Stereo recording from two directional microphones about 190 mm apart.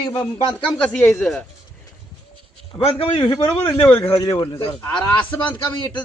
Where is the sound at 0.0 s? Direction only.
20° left (ahead or behind).